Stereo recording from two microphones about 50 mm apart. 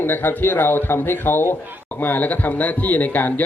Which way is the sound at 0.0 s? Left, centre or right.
Left.